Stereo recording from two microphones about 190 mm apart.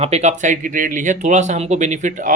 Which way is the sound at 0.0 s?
35° right (ahead or behind).